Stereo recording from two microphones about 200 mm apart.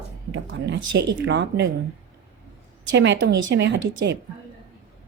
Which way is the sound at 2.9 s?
60° right (ahead or behind).